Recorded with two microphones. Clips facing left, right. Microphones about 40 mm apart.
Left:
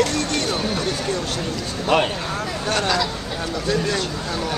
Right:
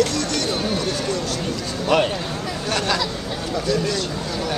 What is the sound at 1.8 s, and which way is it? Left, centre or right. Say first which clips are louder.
Speech: even; centre.